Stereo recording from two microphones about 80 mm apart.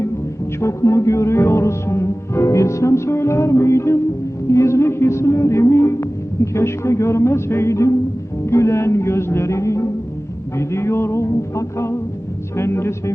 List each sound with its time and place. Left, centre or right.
0.6 s a man's voice: left